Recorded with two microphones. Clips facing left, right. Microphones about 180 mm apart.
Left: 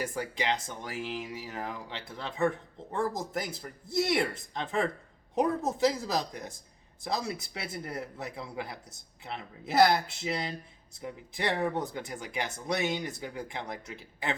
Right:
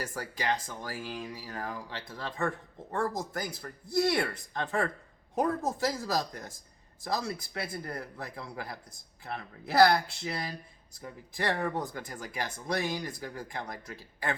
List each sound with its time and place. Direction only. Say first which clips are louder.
0.0 s speech: left 2 dB; 20° left (ahead or behind)